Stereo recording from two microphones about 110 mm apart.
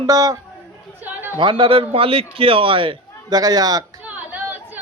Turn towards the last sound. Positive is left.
turn(degrees=-15)  # may be behind; listen again after turning